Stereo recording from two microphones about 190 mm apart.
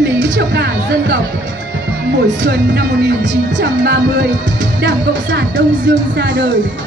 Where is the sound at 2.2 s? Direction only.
65° right (ahead or behind).